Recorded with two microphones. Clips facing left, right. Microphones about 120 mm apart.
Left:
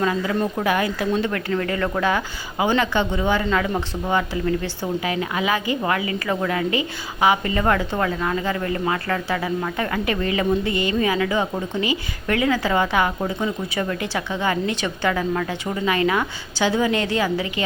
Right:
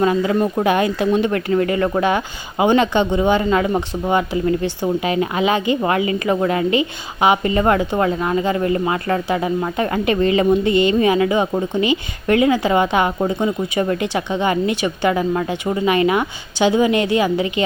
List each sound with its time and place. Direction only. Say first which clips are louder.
0.0 s a woman's voice: right 5 dB; 30° right (ahead or behind)